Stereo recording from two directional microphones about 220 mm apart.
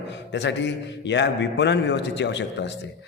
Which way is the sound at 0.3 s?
55° left (ahead or behind).